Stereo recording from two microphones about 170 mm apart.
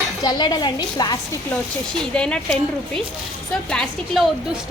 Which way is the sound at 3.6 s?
5° left (ahead or behind).